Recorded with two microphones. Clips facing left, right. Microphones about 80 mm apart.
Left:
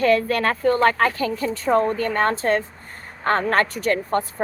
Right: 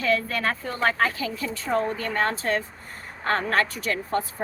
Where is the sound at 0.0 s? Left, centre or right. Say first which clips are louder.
Left 6 dB; left.